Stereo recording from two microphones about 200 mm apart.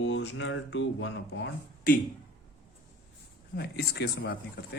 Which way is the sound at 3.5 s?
55° left (ahead or behind).